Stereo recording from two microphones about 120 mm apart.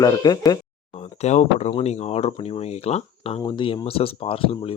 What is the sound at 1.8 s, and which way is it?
Speech, 65° left (ahead or behind).